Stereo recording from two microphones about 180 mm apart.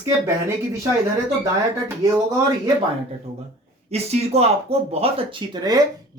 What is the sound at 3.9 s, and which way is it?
A man's voice, 35° right (ahead or behind).